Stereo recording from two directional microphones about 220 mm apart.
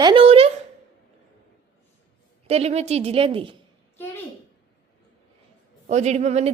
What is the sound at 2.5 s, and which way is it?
Speech, 30° right (ahead or behind).